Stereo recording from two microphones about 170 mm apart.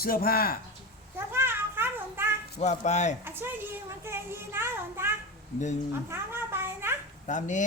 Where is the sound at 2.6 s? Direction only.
40° left (ahead or behind).